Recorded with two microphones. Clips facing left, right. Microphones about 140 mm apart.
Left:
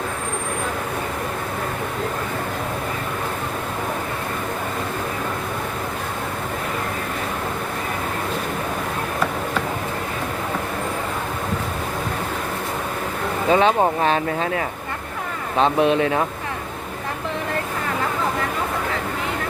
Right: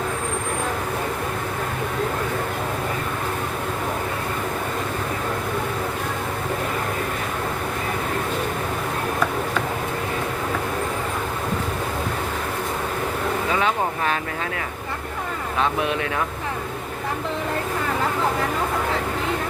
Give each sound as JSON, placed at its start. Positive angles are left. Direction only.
{"t": 13.5, "sound": "speech", "side_deg": 30}